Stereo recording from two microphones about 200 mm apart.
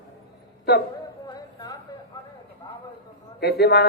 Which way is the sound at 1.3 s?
20° left (ahead or behind).